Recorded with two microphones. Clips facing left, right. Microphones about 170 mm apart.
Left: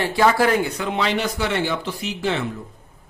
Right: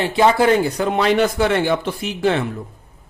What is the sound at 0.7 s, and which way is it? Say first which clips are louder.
A man's voice: right 6 dB; 45° right (ahead or behind).